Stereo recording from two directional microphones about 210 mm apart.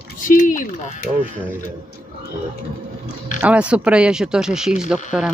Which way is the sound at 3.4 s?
5° right (ahead or behind).